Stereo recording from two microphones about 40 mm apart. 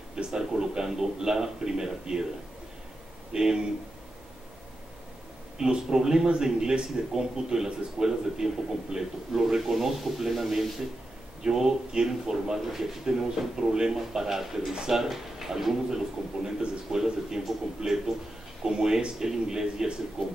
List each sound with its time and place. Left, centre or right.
0.1 s a man's voice: centre
3.3 s a man's voice: centre
5.6 s a man's voice: centre
11.4 s a man's voice: centre